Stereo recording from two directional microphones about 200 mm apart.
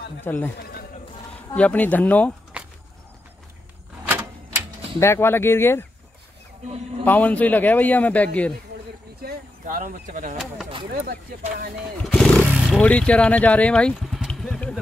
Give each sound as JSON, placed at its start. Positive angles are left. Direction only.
{"t": 0.2, "sound": "a man's voice", "side_deg": 10}
{"t": 0.6, "sound": "chatter", "side_deg": 50}
{"t": 1.5, "sound": "a man's voice", "side_deg": 10}
{"t": 2.6, "sound": "a sound", "side_deg": -5}
{"t": 4.1, "sound": "typewriter", "side_deg": -10}
{"t": 5.0, "sound": "a man's voice", "side_deg": 10}
{"t": 7.1, "sound": "a man's voice", "side_deg": 10}
{"t": 9.2, "sound": "speech", "side_deg": -40}
{"t": 12.1, "sound": "speech", "side_deg": 5}